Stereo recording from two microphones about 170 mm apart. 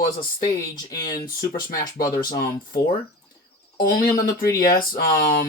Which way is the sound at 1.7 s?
60° left (ahead or behind).